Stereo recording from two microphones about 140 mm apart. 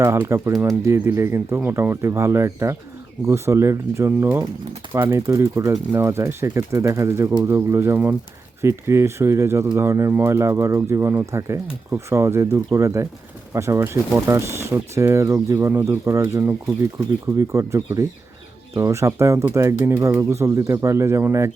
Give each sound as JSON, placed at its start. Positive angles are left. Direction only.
{"t": 0.0, "sound": "speech", "side_deg": -20}